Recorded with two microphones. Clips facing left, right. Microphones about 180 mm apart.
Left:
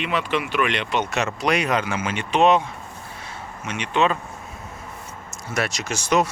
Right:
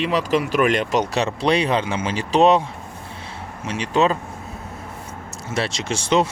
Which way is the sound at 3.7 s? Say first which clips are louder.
Right 2 dB; 35° right (ahead or behind).